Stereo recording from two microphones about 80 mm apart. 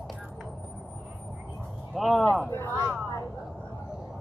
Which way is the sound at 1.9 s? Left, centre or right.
Centre.